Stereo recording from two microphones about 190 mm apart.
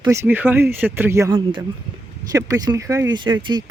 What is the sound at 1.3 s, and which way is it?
Speech, 25° right (ahead or behind).